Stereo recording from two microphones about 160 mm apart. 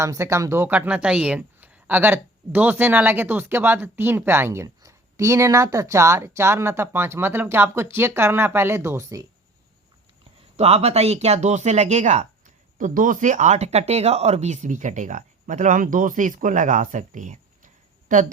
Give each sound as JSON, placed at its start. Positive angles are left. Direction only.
{"t": 0.0, "sound": "speech", "side_deg": -20}
{"t": 10.6, "sound": "speech", "side_deg": -40}